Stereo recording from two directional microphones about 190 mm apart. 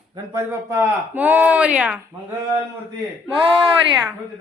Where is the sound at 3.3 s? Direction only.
25° right (ahead or behind).